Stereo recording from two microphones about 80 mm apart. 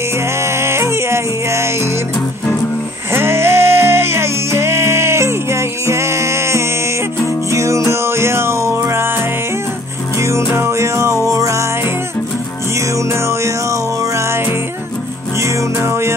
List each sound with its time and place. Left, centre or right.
0.4 s music: right
3.1 s music: right
10.1 s music: right
12.9 s music: right